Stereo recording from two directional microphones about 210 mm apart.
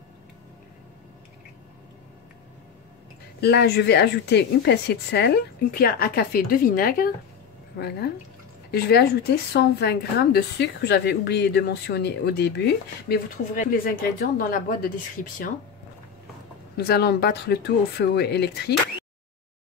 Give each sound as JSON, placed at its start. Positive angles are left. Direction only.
{"t": 3.3, "sound": "a woman's voice", "side_deg": 50}
{"t": 8.7, "sound": "a woman's voice", "side_deg": 50}
{"t": 16.7, "sound": "a woman's voice", "side_deg": 50}